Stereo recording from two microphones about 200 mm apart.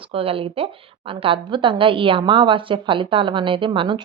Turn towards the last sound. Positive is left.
turn(degrees=-25)  # may be behind; listen again after turning